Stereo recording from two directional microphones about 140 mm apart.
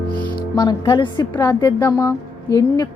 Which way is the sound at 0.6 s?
30° left (ahead or behind).